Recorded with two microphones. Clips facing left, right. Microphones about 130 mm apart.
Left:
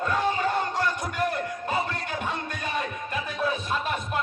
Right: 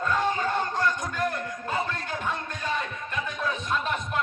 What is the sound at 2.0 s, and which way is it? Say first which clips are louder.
Music: left 1 dB; 70° left (ahead or behind).